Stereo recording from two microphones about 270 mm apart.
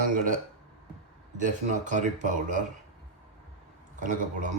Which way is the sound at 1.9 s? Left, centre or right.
Right.